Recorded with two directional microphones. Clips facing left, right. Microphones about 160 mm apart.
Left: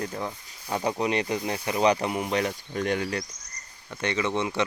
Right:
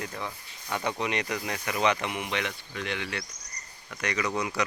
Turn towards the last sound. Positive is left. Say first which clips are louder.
# left 3 dB
turn(degrees=25)  # may be behind; listen again after turning